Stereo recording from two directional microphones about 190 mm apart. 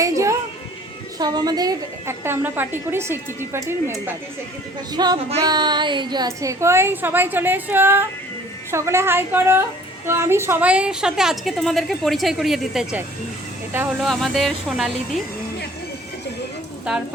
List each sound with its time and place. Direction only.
0.0 s music: 15° right (ahead or behind)
1.2 s a woman's voice: 20° right (ahead or behind); by 15.2 s centre (ahead or behind)